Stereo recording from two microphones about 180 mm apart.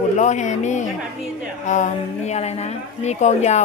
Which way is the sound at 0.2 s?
40° left (ahead or behind).